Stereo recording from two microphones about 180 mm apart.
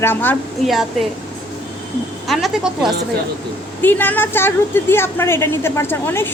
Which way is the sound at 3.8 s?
10° left (ahead or behind).